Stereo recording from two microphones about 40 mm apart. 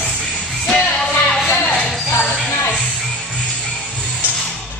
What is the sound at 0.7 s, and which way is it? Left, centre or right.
Music, centre.